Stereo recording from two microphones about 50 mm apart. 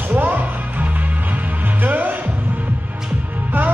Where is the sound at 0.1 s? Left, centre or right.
Right.